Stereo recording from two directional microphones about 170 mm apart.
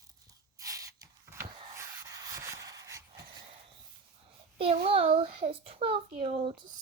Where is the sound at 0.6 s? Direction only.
20° right (ahead or behind).